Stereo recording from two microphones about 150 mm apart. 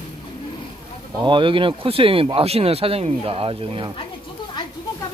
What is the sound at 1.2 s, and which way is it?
Speech, 35° right (ahead or behind).